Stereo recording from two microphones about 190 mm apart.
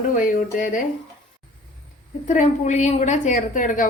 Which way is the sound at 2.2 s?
40° left (ahead or behind).